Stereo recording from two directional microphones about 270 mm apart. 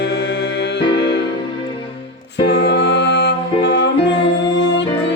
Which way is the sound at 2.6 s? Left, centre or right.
Left.